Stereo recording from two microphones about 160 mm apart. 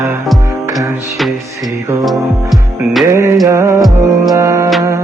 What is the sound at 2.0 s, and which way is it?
Music, centre (ahead or behind).